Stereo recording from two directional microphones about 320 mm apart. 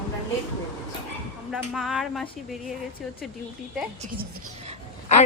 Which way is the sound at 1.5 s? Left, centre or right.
Centre.